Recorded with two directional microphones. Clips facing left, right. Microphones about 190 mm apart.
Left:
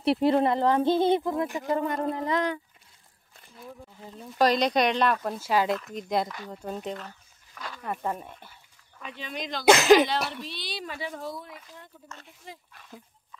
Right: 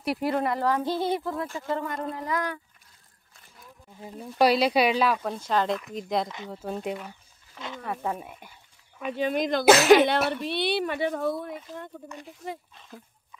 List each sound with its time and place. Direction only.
0.0 s speech: 25° left (ahead or behind)
4.0 s speech: 15° right (ahead or behind)
6.2 s speech: 20° right (ahead or behind)
6.5 s speech: 5° right (ahead or behind)
7.5 s a sound: 20° right (ahead or behind)
7.8 s speech: centre (ahead or behind)
9.1 s speech: 50° right (ahead or behind)
9.7 s speech: centre (ahead or behind)
10.4 s speech: 60° right (ahead or behind)